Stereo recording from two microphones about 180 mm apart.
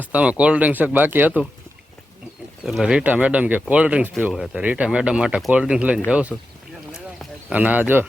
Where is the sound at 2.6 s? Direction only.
Centre (ahead or behind).